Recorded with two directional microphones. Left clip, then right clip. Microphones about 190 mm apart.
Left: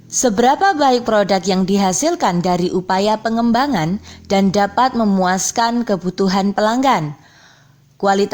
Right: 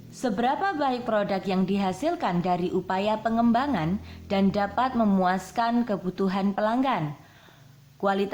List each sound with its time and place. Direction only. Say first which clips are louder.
0.2 s a woman's voice: left 12 dB; 40° left (ahead or behind)
8.0 s a woman's voice: left 10 dB; 40° left (ahead or behind)